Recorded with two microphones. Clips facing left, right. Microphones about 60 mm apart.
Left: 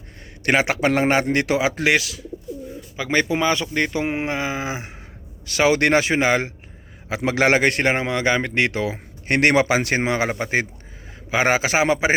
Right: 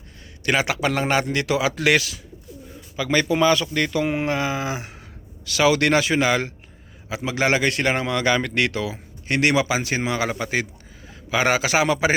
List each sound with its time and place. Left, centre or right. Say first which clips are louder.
0.5 s speech: left 3 dB; left
2.0 s speech: even; centre
2.9 s speech: even; left
7.2 s speech: left 3 dB; left